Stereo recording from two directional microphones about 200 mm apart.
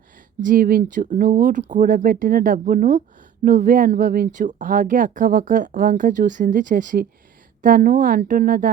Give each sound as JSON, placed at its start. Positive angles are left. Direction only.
{"t": 0.4, "sound": "speech", "side_deg": -45}